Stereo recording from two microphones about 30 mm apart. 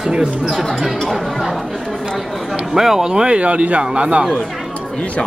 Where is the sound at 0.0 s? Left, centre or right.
Right.